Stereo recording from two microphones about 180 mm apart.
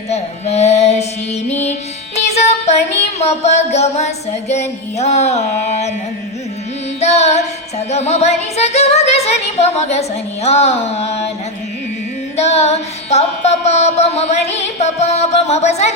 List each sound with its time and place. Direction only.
0.1 s mantra: 35° left (ahead or behind)
2.1 s music: 40° left (ahead or behind)
7.0 s carnatic music: 40° left (ahead or behind)
7.9 s music: 40° left (ahead or behind)
12.4 s carnatic music: 35° left (ahead or behind)
13.7 s music: 35° left (ahead or behind)